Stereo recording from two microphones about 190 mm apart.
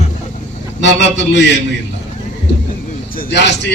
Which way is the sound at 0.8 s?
70° left (ahead or behind).